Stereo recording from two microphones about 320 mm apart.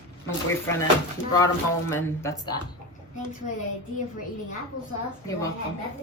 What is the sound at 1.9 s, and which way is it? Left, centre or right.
Speech, centre.